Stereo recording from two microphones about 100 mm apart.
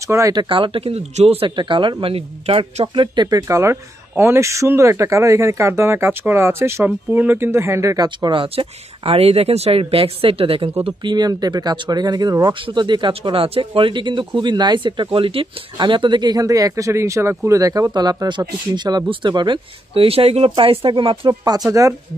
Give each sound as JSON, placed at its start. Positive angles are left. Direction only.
{"t": 0.0, "sound": "speech", "side_deg": -30}
{"t": 0.4, "sound": "speech", "side_deg": -60}
{"t": 1.6, "sound": "speech", "side_deg": -55}
{"t": 3.4, "sound": "speech", "side_deg": -30}
{"t": 8.3, "sound": "speech", "side_deg": -65}
{"t": 10.9, "sound": "speech", "side_deg": -45}
{"t": 13.1, "sound": "speech", "side_deg": -65}
{"t": 20.5, "sound": "speech", "side_deg": -70}
{"t": 21.3, "sound": "speech", "side_deg": -40}